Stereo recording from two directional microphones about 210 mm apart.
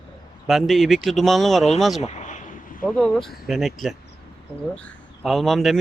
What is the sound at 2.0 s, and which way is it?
Vehicle, 35° left (ahead or behind).